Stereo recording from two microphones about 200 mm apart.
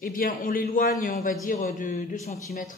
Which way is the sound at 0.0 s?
45° left (ahead or behind).